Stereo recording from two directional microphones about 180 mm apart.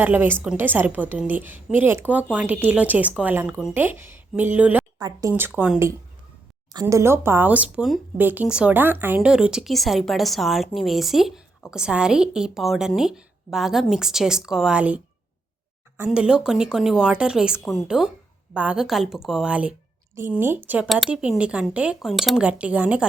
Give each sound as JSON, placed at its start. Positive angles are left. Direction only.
{"t": 0.0, "sound": "speech", "side_deg": -10}
{"t": 4.9, "sound": "speech", "side_deg": -20}
{"t": 5.3, "sound": "speech", "side_deg": -10}
{"t": 6.8, "sound": "speech", "side_deg": -15}